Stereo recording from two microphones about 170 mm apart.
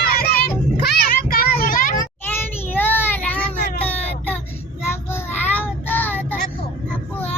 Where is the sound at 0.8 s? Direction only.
65° left (ahead or behind).